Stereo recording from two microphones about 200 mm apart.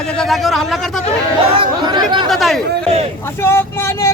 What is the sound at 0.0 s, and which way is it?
Speech, 5° left (ahead or behind).